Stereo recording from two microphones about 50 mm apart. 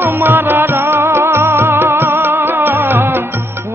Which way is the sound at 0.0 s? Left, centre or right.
Right.